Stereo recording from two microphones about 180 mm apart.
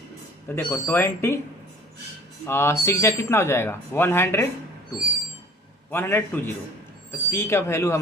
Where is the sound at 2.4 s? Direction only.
15° left (ahead or behind).